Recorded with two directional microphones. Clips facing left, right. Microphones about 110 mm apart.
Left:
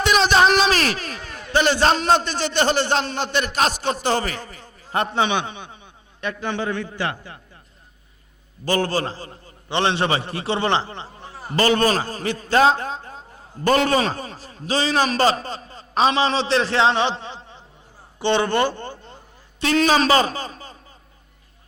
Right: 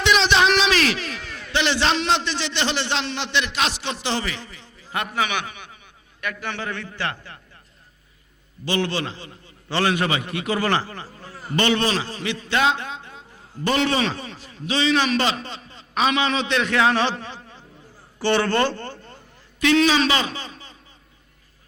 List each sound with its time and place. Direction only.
0.0 s a sound: 45° left (ahead or behind)
1.5 s a man's voice: 45° left (ahead or behind); by 7.3 s 15° left (ahead or behind)
8.6 s a man's voice: 45° left (ahead or behind)
9.6 s a man's voice: 25° left (ahead or behind)
19.5 s a man's voice: 40° left (ahead or behind)